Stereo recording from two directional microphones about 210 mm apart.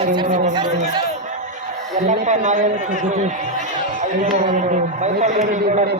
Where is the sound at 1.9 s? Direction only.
35° right (ahead or behind).